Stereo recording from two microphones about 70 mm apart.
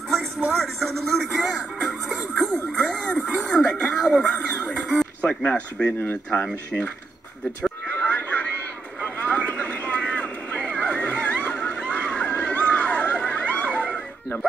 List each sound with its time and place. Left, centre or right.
0.6 s music: centre
3.4 s a sound: centre
5.2 s speech: centre
5.9 s speech: left
6.3 s speech: centre
7.9 s a sound: left
9.0 s vehicle: centre